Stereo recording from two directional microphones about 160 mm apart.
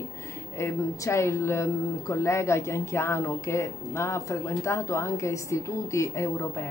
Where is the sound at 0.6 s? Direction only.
15° left (ahead or behind).